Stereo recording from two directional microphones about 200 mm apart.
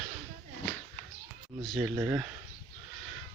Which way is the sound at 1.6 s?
Centre (ahead or behind).